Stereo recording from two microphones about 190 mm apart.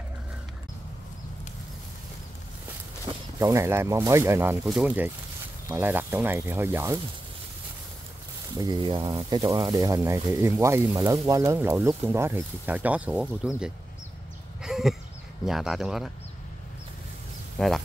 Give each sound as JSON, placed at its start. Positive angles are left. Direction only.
{"t": 3.3, "sound": "speech", "side_deg": -15}
{"t": 8.5, "sound": "speech", "side_deg": -25}
{"t": 14.6, "sound": "a sound", "side_deg": 0}
{"t": 15.4, "sound": "speech", "side_deg": 0}
{"t": 17.6, "sound": "speech", "side_deg": 0}